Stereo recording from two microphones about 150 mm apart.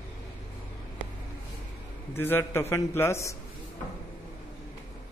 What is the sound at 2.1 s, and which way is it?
A man's voice, 15° left (ahead or behind).